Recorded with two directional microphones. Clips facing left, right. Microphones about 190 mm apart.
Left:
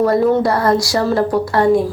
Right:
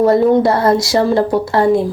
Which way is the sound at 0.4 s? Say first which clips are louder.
Right 2 dB; 25° right (ahead or behind).